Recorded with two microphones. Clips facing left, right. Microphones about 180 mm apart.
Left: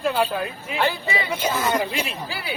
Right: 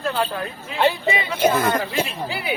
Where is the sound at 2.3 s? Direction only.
20° right (ahead or behind).